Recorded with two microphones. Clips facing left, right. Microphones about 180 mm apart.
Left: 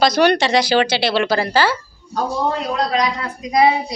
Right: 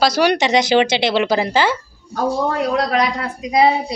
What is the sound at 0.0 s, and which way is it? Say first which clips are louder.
Speech: left 1 dB; 10° right (ahead or behind).